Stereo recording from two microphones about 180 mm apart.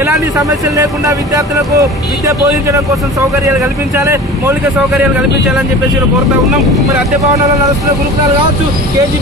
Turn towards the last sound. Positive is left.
turn(degrees=-15)  # may be behind; listen again after turning